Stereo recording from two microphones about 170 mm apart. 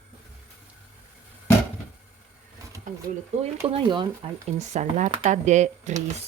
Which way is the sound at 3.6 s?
30° right (ahead or behind).